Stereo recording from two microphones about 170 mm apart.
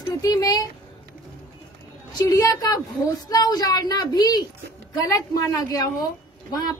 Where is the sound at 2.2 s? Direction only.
20° left (ahead or behind).